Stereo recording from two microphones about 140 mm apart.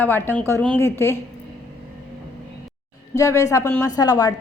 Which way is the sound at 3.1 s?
20° left (ahead or behind).